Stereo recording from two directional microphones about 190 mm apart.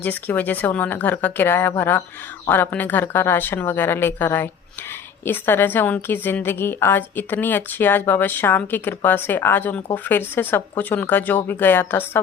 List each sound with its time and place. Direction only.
0.0 s a woman's voice: 10° left (ahead or behind)